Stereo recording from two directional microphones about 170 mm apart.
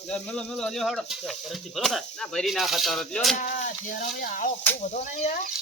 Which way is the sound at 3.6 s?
50° left (ahead or behind).